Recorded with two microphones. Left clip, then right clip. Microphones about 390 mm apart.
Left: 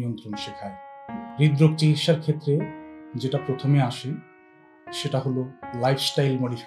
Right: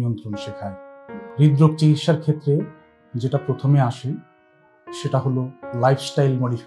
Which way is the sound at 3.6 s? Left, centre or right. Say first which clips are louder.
Right 3 dB; right.